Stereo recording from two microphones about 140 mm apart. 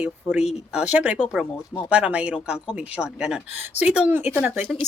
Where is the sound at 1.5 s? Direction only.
20° left (ahead or behind).